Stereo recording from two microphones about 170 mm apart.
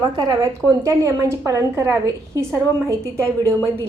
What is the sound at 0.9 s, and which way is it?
A woman's voice, 20° right (ahead or behind).